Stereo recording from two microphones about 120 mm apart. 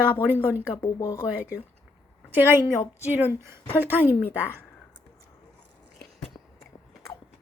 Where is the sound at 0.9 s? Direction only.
25° left (ahead or behind).